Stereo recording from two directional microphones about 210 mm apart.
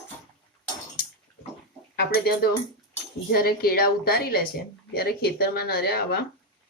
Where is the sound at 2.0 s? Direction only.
45° left (ahead or behind).